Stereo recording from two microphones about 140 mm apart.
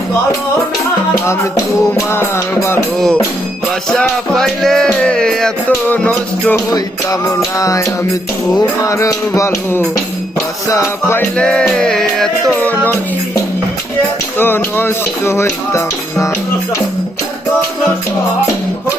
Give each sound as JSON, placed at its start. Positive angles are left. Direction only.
{"t": 1.3, "sound": "music", "side_deg": 20}
{"t": 3.8, "sound": "music", "side_deg": 5}
{"t": 7.6, "sound": "music", "side_deg": 25}
{"t": 11.8, "sound": "music", "side_deg": 5}